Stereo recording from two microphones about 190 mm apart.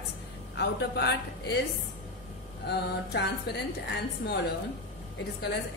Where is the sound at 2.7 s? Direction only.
60° left (ahead or behind).